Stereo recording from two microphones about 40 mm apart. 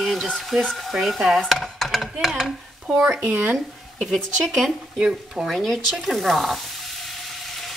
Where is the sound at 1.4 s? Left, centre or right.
Centre.